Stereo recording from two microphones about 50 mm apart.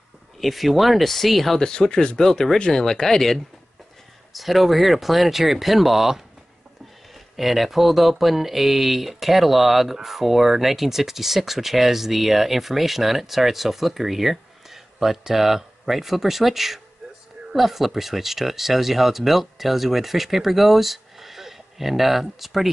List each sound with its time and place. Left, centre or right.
0.4 s speech: centre
1.6 s speech: centre
7.3 s speech: centre